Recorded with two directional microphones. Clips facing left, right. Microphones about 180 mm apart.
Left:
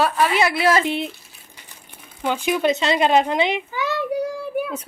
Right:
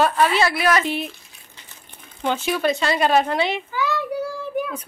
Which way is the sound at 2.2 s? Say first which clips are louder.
Left 1 dB; 10° left (ahead or behind).